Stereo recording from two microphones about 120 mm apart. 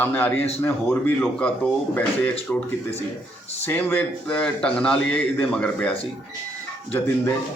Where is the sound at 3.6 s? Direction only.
15° left (ahead or behind).